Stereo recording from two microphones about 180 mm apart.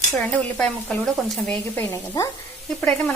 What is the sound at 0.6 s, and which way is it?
Speech, 5° left (ahead or behind).